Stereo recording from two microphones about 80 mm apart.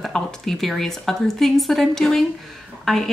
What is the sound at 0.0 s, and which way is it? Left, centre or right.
A woman's voice, centre.